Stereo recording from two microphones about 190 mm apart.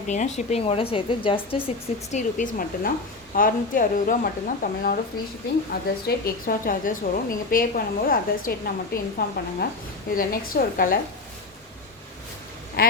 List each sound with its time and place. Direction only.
0.3 s a woman's voice: 30° left (ahead or behind)
2.1 s a woman's voice: 45° left (ahead or behind)